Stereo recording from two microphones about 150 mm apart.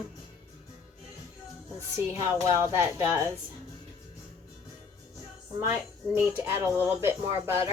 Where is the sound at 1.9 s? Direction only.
20° right (ahead or behind).